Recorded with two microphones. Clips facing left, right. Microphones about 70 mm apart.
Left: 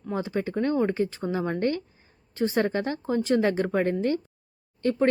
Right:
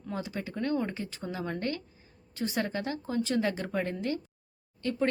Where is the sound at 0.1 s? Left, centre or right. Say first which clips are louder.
Left 8 dB; left.